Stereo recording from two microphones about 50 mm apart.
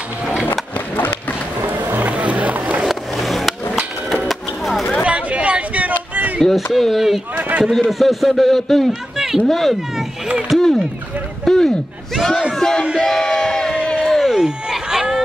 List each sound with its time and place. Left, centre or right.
0.5 s skateboard: left
2.0 s music: right
2.8 s vehicle: centre
4.3 s music: centre
5.0 s a sound: right
6.4 s speech: centre
7.3 s a man's voice: right
8.0 s speech: centre
9.1 s run: centre
9.5 s speech: centre
10.5 s a sound: centre
12.9 s crowd: centre
14.1 s a sound: centre